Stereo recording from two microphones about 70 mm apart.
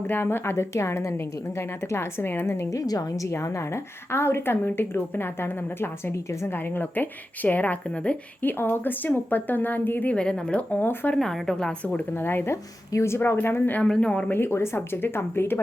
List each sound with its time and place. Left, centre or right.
0.1 s a woman's voice: left
2.6 s a woman's voice: left; by 8.2 s centre
8.4 s speech: left
11.1 s speech: centre
11.9 s a woman's voice: left
13.8 s speech: centre
14.1 s speech: centre
14.3 s a woman's voice: left